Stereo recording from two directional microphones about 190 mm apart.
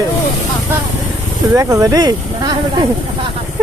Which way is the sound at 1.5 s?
15° right (ahead or behind).